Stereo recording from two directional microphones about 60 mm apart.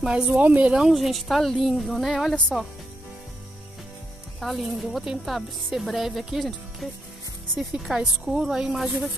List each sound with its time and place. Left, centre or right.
0.0 s a woman's voice: centre
0.3 s speech: right
0.7 s a woman's voice: centre
4.4 s a woman's voice: centre
7.8 s a woman's voice: centre